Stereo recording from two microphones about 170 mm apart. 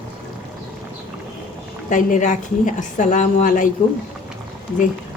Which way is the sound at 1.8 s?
50° left (ahead or behind).